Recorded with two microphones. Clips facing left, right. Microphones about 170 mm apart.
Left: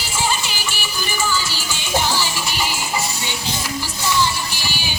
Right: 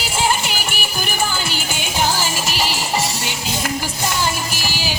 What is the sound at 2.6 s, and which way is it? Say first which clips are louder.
Music: right 3 dB; 85° right.